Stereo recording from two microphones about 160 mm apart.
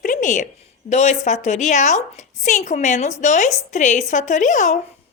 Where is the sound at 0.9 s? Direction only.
45° left (ahead or behind).